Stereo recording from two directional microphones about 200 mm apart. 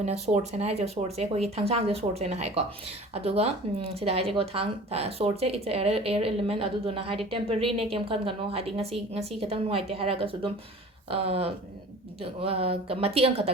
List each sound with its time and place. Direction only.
0.0 s speech: 35° right (ahead or behind)